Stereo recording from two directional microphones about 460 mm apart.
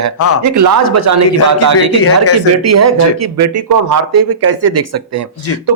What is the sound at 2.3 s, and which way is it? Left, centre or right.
Speech, right.